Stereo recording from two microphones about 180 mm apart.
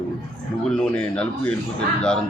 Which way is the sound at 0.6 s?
5° left (ahead or behind).